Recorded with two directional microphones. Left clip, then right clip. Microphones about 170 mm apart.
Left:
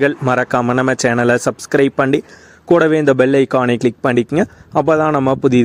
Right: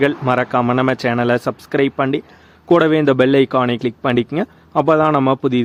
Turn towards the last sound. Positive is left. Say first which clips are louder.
# left 2 dB
turn(degrees=25)  # may be behind; listen again after turning